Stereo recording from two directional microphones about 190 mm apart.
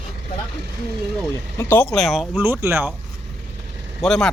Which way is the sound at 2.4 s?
10° right (ahead or behind).